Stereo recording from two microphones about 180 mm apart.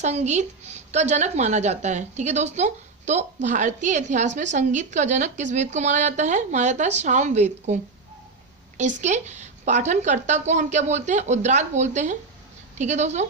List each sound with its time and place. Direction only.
0.0 s a woman's voice: 40° right (ahead or behind)
9.0 s a woman's voice: 40° right (ahead or behind)